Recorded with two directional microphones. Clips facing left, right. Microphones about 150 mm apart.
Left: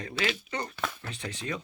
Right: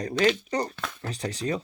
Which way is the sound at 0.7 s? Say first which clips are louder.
Left 2 dB; 5° left (ahead or behind).